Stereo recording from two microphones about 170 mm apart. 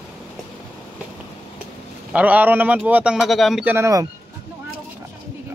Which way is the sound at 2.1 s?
10° right (ahead or behind).